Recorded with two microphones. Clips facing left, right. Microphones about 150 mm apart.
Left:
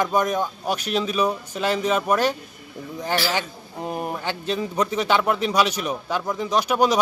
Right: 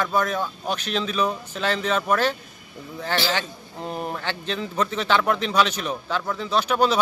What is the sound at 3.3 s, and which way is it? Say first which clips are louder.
Speech: left 1 dB; 10° left (ahead or behind).